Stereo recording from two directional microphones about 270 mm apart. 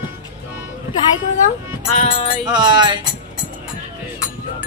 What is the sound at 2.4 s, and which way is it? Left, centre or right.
Speech, centre.